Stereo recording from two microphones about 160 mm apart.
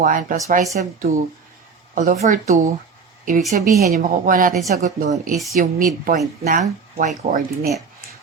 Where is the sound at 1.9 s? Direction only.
50° right (ahead or behind).